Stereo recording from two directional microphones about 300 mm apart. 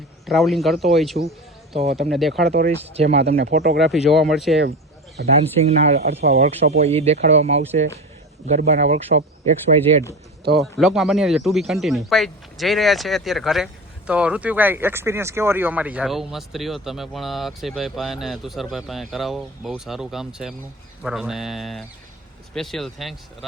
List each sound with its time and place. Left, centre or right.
0.3 s speech: centre
1.7 s speech: right
2.1 s speech: centre
2.5 s speech: right
3.9 s speech: centre
5.2 s speech: right
5.6 s speech: right
10.6 s speech: centre